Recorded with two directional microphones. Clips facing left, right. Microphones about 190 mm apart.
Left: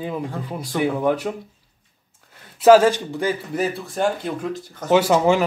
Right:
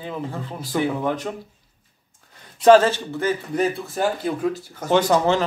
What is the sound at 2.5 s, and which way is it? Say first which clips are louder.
Speech: left 1 dB; 5° left (ahead or behind).